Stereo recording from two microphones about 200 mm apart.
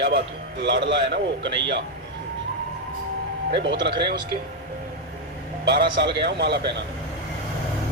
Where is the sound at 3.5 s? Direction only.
60° right (ahead or behind).